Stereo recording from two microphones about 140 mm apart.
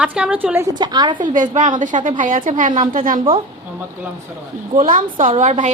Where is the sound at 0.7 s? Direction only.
30° right (ahead or behind).